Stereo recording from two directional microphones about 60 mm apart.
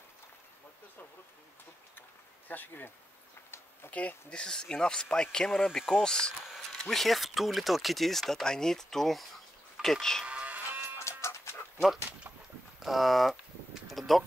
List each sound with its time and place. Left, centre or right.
2.0 s a sound: left
3.8 s speech: left
4.3 s speech: centre
10.2 s livestock: right
11.0 s dog: left
12.8 s speech: centre
13.8 s a sound: centre